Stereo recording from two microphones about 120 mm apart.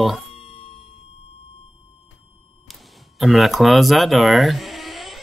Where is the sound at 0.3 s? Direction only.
50° left (ahead or behind).